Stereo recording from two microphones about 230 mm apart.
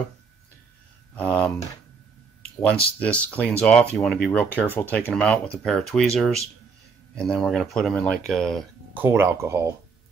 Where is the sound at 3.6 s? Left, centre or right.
Centre.